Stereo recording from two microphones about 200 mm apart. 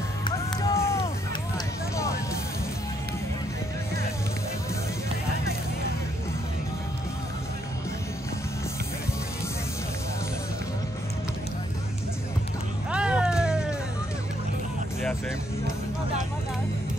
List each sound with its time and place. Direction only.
0.2 s music: 20° left (ahead or behind)
12.9 s music: 5° right (ahead or behind)